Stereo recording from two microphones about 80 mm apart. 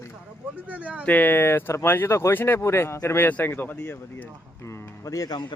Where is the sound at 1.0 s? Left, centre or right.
Left.